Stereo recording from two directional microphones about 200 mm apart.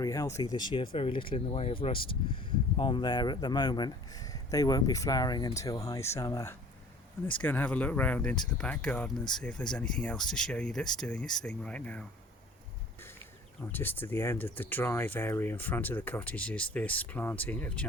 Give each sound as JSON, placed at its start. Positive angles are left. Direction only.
{"t": 0.0, "sound": "speech", "side_deg": 15}
{"t": 13.6, "sound": "speech", "side_deg": 10}